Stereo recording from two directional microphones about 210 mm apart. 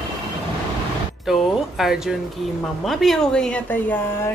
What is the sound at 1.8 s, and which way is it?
Speech, centre (ahead or behind).